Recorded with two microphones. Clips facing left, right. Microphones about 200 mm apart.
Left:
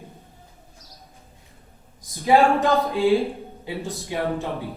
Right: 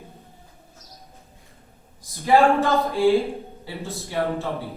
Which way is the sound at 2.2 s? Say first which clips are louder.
Even; 15° left (ahead or behind).